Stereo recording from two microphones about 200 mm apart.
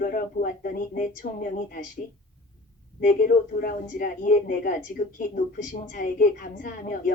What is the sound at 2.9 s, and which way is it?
Speech, 45° left (ahead or behind).